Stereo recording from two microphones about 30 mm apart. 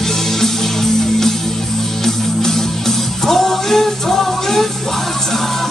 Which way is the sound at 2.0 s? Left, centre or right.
Centre.